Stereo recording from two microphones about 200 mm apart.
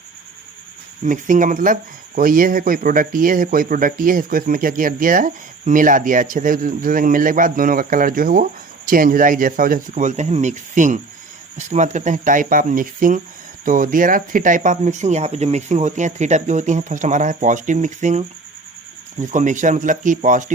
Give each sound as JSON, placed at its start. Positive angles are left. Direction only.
{"t": 1.0, "sound": "speech", "side_deg": -40}